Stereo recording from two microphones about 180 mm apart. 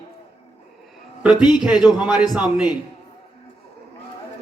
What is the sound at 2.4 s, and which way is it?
Speech, 25° left (ahead or behind).